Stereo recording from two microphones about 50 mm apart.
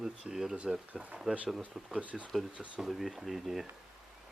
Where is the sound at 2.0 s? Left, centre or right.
Right.